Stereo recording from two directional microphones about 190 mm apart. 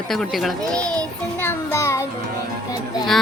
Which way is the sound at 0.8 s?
20° right (ahead or behind).